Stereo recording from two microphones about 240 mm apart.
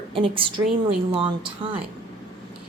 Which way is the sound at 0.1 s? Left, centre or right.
Right.